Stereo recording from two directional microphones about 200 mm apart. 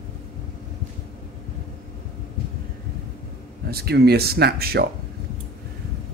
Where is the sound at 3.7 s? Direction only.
50° right (ahead or behind).